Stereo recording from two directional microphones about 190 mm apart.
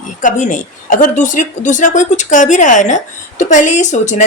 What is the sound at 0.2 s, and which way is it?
A woman's voice, 40° left (ahead or behind).